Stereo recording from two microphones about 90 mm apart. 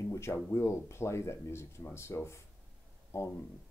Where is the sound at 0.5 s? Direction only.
30° left (ahead or behind).